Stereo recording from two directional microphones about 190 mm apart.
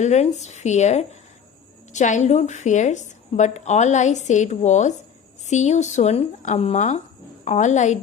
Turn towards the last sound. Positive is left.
turn(degrees=40)  # may be behind; listen again after turning